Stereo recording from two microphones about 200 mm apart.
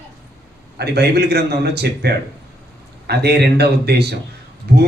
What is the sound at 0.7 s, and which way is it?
Speech, 55° right (ahead or behind).